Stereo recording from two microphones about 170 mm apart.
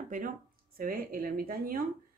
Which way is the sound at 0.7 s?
55° right (ahead or behind).